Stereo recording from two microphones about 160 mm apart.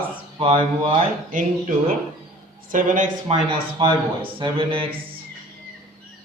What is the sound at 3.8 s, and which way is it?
Speech, 30° right (ahead or behind).